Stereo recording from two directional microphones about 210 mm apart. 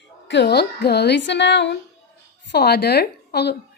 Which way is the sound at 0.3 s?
55° left (ahead or behind).